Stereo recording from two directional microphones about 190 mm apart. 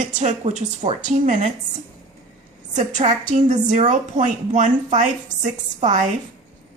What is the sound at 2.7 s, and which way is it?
A woman's voice, 40° right (ahead or behind).